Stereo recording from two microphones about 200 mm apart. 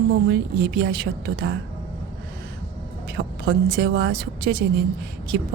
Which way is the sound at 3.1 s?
55° right (ahead or behind).